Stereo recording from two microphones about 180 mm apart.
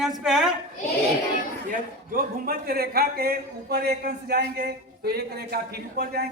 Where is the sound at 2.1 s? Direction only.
55° right (ahead or behind).